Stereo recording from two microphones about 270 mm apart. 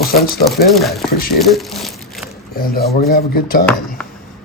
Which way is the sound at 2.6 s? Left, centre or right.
Left.